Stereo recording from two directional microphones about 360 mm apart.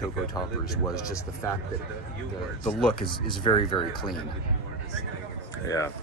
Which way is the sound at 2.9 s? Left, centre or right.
Centre.